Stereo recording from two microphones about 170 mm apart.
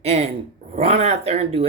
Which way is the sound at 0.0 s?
40° right (ahead or behind).